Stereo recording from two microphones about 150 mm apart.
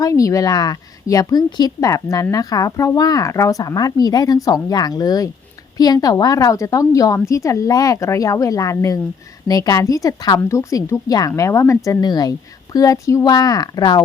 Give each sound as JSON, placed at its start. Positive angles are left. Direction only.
{"t": 0.0, "sound": "a woman's voice", "side_deg": 20}